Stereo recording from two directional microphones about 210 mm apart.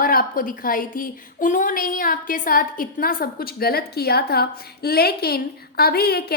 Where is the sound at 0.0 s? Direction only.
45° left (ahead or behind).